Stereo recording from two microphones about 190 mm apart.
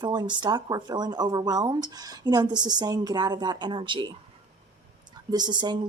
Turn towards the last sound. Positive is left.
turn(degrees=-20)  # may be behind; listen again after turning